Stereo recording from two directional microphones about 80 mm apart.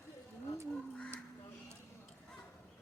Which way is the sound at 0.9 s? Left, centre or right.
Centre.